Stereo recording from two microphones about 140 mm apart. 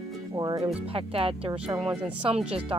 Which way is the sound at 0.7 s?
45° right (ahead or behind).